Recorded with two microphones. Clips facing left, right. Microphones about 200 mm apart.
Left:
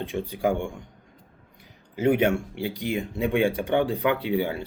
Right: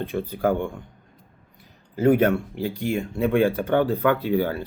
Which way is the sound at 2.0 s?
40° right (ahead or behind).